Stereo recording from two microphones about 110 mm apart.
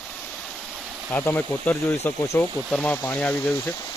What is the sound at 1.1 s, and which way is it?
Speech, 15° left (ahead or behind).